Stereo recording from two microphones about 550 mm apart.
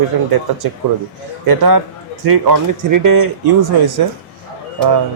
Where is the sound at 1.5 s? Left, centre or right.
Right.